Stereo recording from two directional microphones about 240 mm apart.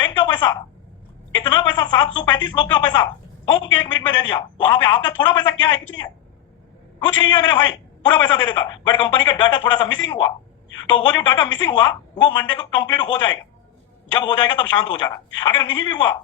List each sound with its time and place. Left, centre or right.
0.0 s a sound: centre
1.5 s a man's voice: centre
7.2 s a man's voice: centre